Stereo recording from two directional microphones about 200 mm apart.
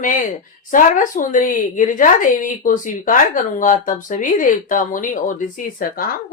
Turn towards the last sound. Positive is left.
turn(degrees=45)  # may be behind; listen again after turning